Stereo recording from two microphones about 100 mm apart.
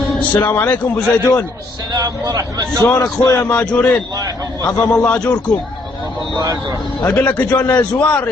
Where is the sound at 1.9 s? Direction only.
40° right (ahead or behind).